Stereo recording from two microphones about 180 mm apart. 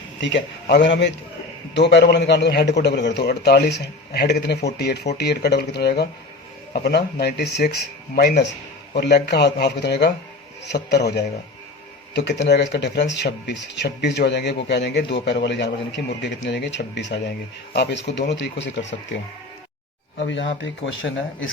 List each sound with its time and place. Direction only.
0.2 s speech: 80° left
20.1 s a man's voice: 85° left